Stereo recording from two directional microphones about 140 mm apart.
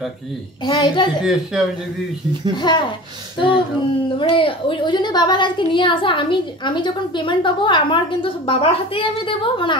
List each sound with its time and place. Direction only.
0.7 s a woman's voice: 35° left (ahead or behind)
1.2 s speech: 5° right (ahead or behind)
2.5 s a woman's voice: 35° left (ahead or behind)
4.2 s a woman's voice: 40° left (ahead or behind)